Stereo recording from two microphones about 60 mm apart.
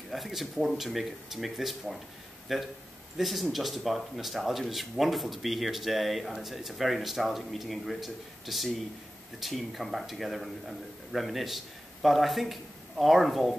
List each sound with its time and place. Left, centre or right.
0.1 s a man's voice: centre